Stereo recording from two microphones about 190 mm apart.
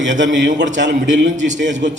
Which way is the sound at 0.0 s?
75° right (ahead or behind).